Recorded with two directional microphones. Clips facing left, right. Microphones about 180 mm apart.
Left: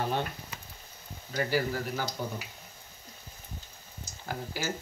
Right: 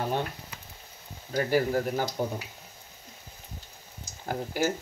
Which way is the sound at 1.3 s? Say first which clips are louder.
Right 5 dB; 45° right (ahead or behind).